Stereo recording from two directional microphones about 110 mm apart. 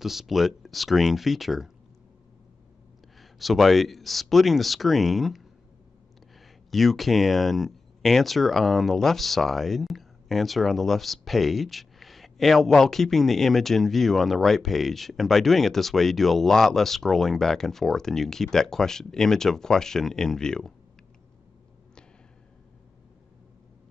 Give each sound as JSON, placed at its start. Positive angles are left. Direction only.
{"t": 0.0, "sound": "speech", "side_deg": 0}
{"t": 3.2, "sound": "speech", "side_deg": 0}
{"t": 6.7, "sound": "speech", "side_deg": 0}